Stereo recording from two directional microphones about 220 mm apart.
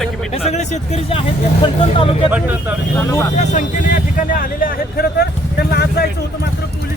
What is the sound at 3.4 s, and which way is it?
Speech, 35° left (ahead or behind).